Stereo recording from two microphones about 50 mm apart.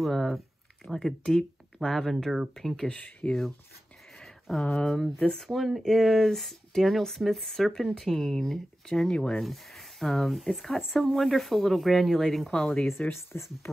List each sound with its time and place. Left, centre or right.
0.0 s speech: centre
0.8 s speech: left
1.2 s speech: centre
3.2 s speech: left
4.2 s a sound: centre
4.8 s speech: centre
9.4 s speech: centre
13.1 s speech: left